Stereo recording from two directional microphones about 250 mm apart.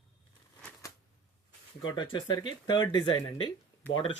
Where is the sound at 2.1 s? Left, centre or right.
Centre.